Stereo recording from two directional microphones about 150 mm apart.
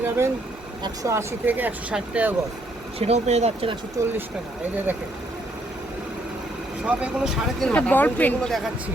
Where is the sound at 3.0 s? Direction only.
45° right (ahead or behind).